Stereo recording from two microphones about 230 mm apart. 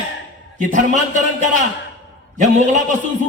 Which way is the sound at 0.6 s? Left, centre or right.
Right.